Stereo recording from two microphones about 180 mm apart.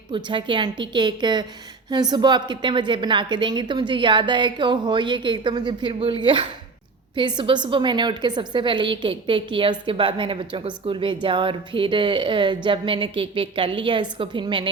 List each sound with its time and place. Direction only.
0.1 s a woman's voice: 25° right (ahead or behind)